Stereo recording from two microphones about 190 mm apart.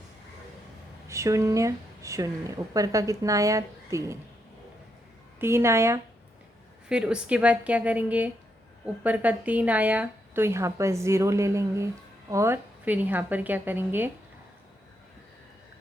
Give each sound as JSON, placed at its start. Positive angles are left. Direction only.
{"t": 1.0, "sound": "speech", "side_deg": -15}
{"t": 5.4, "sound": "speech", "side_deg": -15}